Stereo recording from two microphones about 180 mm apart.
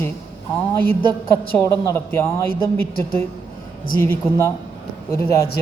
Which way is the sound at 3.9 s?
15° left (ahead or behind).